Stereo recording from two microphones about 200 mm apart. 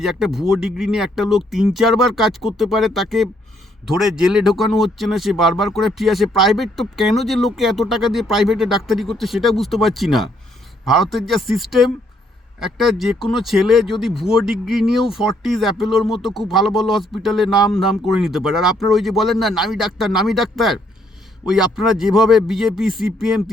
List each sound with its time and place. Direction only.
0.0 s speech: centre (ahead or behind)